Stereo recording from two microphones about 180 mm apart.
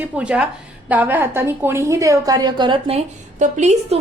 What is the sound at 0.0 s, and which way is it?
A woman's voice, 5° right (ahead or behind).